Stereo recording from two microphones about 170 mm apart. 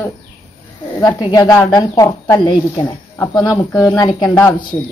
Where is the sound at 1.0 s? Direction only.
20° left (ahead or behind).